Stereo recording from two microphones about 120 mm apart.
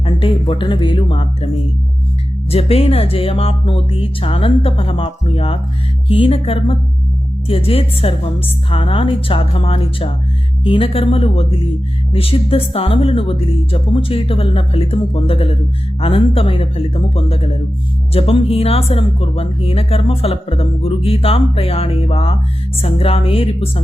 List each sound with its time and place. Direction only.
0.0 s speech: 50° left (ahead or behind)
2.5 s speech: 55° left (ahead or behind)